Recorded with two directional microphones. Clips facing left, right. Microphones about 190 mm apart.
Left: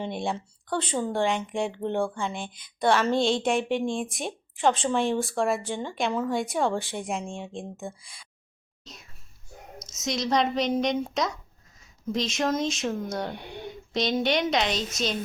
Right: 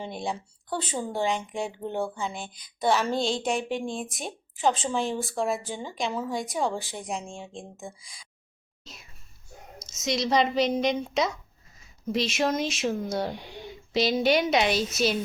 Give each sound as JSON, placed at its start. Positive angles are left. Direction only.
{"t": 0.0, "sound": "speech", "side_deg": 0}
{"t": 13.3, "sound": "speech", "side_deg": 60}
{"t": 13.9, "sound": "a woman's voice", "side_deg": -5}